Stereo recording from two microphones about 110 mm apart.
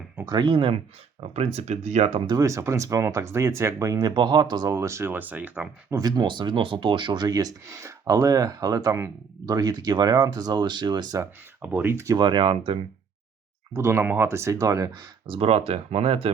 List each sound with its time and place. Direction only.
0.3 s speech: 45° right (ahead or behind)
1.2 s speech: 70° right (ahead or behind)
2.2 s speech: 35° right (ahead or behind); by 5.6 s 15° right (ahead or behind)
5.9 s speech: 35° right (ahead or behind)
11.6 s speech: 20° right (ahead or behind)
12.1 s speech: 45° right (ahead or behind)
13.7 s speech: 25° right (ahead or behind)
15.3 s speech: 60° right (ahead or behind)